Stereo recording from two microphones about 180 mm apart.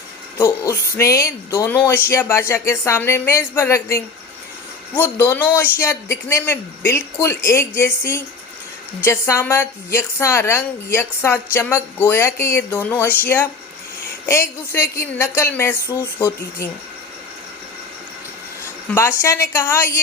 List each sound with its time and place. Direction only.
0.3 s speech: 15° left (ahead or behind)
18.9 s speech: 15° left (ahead or behind)